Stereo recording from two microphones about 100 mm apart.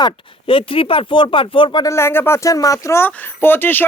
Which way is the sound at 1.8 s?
25° left (ahead or behind).